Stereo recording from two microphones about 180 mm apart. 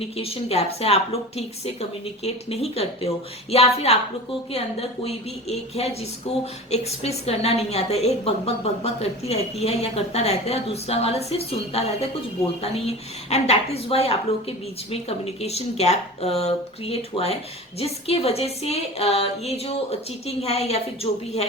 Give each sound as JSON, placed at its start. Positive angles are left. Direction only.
{"t": 0.2, "sound": "speech", "side_deg": 35}
{"t": 13.3, "sound": "speech", "side_deg": 35}